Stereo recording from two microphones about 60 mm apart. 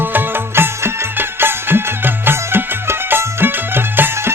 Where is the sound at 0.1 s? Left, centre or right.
Right.